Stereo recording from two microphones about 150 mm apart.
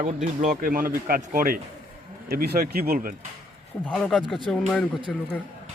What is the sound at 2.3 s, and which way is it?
Speech, 85° right.